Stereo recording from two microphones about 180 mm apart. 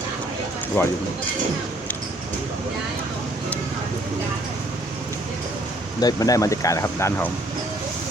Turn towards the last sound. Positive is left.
turn(degrees=15)  # may be behind; listen again after turning